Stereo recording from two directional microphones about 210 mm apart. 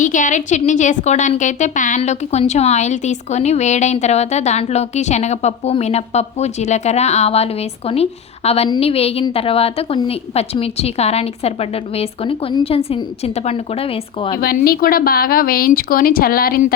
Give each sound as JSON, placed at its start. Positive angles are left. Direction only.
{"t": 0.0, "sound": "a woman's voice", "side_deg": 40}
{"t": 14.4, "sound": "a woman's voice", "side_deg": 45}